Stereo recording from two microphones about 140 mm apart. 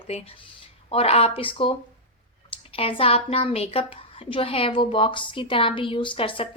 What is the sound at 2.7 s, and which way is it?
A woman's voice, 40° left (ahead or behind).